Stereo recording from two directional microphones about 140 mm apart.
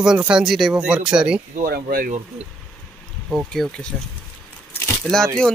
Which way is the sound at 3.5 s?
5° left (ahead or behind).